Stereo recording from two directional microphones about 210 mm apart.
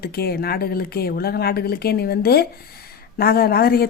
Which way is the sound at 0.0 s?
50° left (ahead or behind).